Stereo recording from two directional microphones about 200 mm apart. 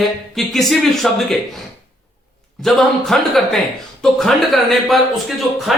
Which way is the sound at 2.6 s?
Centre (ahead or behind).